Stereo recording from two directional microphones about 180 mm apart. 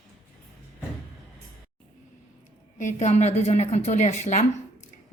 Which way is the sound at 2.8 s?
40° left (ahead or behind).